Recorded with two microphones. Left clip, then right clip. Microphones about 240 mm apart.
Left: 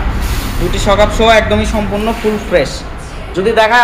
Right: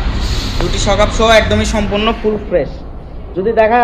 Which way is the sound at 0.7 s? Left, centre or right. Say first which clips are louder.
Left 3 dB; left.